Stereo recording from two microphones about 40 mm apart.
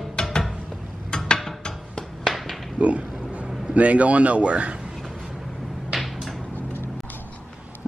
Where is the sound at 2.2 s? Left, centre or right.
Centre.